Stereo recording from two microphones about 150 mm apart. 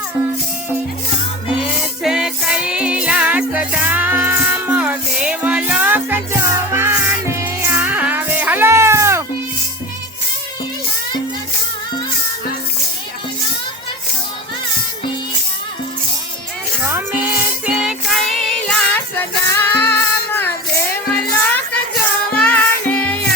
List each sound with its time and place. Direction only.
1.8 s music: 5° right (ahead or behind)
16.8 s music: 15° right (ahead or behind); by 23.2 s 10° left (ahead or behind)